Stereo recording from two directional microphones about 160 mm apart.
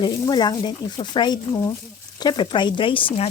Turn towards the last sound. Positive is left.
turn(degrees=35)  # may be behind; listen again after turning